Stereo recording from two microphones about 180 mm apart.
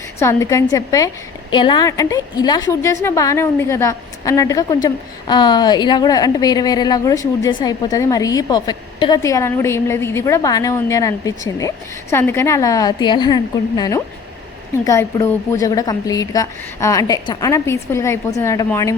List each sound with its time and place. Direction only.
0.2 s a woman's voice: 15° left (ahead or behind)